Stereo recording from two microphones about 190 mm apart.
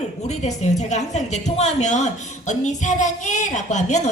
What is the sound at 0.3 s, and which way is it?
A woman's voice, 35° left (ahead or behind).